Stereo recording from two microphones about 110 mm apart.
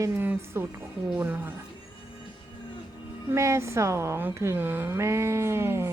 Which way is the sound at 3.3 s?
25° right (ahead or behind).